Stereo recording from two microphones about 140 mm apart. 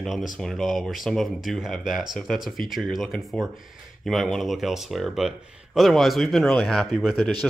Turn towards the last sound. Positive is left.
turn(degrees=5)  # may be behind; listen again after turning